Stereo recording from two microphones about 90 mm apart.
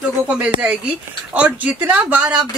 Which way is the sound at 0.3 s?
15° right (ahead or behind).